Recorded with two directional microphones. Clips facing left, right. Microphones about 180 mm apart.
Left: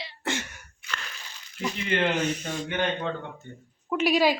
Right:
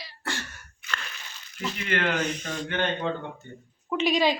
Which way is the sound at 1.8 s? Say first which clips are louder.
Left 2 dB; 25° left (ahead or behind).